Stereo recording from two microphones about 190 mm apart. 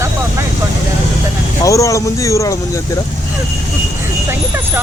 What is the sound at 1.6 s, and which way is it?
Speech, 15° left (ahead or behind).